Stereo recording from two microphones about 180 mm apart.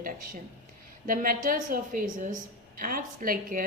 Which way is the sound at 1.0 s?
50° right (ahead or behind).